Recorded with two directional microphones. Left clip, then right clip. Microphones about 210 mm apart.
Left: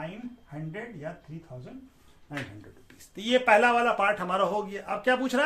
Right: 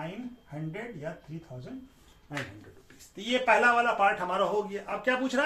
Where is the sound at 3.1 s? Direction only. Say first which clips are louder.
Left 3 dB; 55° left (ahead or behind).